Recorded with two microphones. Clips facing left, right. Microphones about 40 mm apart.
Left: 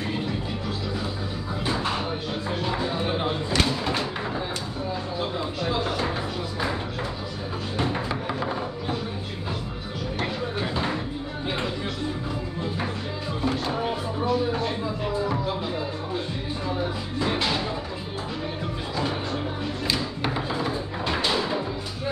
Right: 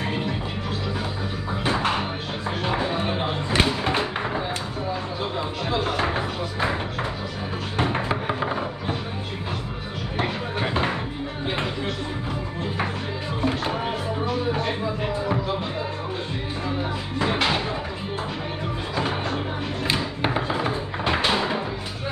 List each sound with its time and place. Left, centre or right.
1.6 s music: right
5.9 s music: right
7.8 s music: right
10.1 s a sound: right
10.7 s music: right
13.4 s music: right
17.4 s a sound: right
18.9 s music: right